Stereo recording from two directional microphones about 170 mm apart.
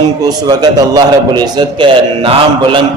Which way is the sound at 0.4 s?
25° right (ahead or behind).